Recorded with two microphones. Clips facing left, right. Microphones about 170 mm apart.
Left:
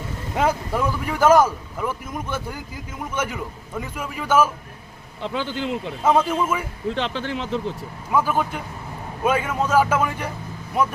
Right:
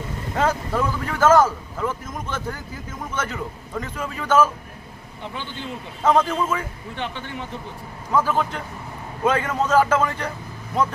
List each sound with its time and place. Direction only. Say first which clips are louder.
0.3 s speech: even; 10° left (ahead or behind)
3.8 s speech: even; 10° left (ahead or behind)
5.2 s speech: left 7 dB; 90° left
6.0 s speech: even; 10° left (ahead or behind)
6.8 s speech: left 6 dB; 90° left
8.1 s speech: even; 10° left (ahead or behind)